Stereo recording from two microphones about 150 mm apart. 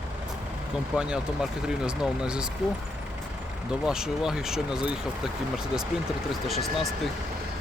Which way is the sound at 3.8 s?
5° right (ahead or behind).